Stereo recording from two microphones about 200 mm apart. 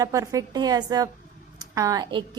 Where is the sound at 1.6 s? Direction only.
15° right (ahead or behind).